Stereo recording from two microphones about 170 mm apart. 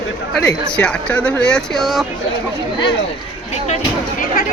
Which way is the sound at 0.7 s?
5° left (ahead or behind).